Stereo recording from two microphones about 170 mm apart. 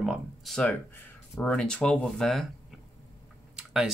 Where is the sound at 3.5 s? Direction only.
5° right (ahead or behind).